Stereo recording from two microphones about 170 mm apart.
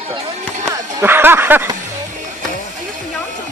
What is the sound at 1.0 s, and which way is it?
Speech, 10° right (ahead or behind).